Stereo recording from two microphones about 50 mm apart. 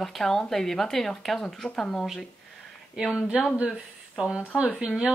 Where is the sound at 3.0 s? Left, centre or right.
Centre.